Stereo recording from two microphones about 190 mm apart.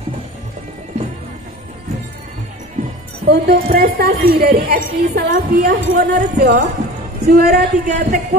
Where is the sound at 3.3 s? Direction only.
55° right (ahead or behind).